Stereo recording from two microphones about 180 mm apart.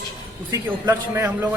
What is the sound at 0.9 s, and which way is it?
Speech, 10° right (ahead or behind).